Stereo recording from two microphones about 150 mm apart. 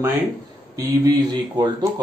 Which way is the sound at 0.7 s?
25° right (ahead or behind).